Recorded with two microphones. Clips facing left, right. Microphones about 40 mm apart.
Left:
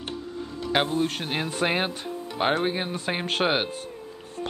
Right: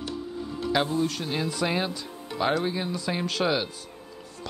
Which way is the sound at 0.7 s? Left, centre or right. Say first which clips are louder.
Left 1 dB; left.